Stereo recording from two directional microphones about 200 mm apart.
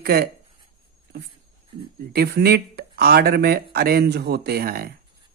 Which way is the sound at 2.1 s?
50° right (ahead or behind).